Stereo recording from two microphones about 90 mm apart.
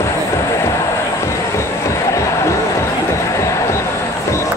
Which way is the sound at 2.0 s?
35° left (ahead or behind).